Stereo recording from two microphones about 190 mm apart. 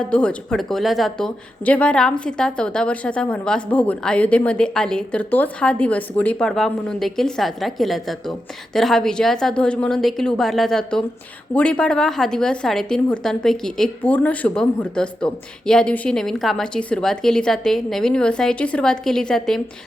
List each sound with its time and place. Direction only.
0.0 s a woman's voice: 5° left (ahead or behind)